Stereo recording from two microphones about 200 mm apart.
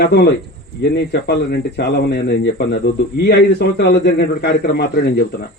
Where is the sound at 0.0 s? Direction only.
50° left (ahead or behind).